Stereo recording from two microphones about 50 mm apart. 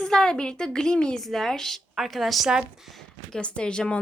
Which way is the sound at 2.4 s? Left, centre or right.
Centre.